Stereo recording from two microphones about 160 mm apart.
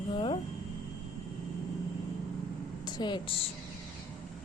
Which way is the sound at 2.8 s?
25° left (ahead or behind).